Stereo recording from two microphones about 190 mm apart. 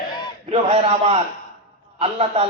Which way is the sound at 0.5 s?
30° right (ahead or behind).